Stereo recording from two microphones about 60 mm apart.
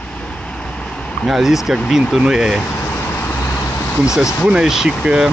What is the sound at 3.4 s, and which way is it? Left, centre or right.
Vehicle, left.